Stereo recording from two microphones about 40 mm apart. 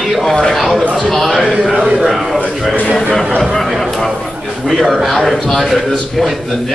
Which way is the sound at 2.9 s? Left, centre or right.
Centre.